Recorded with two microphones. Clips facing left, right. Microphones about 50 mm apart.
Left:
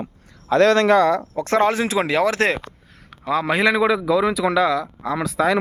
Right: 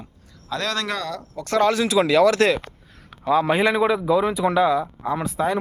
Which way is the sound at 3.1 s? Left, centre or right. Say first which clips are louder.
Right 2 dB; left.